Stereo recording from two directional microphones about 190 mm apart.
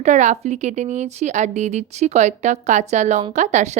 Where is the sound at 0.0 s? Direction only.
40° right (ahead or behind).